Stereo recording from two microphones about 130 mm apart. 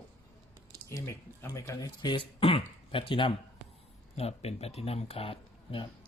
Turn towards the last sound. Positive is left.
turn(degrees=45)  # may be behind; listen again after turning